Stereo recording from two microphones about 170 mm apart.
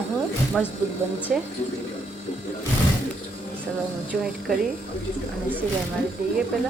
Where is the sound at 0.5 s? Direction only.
Centre (ahead or behind).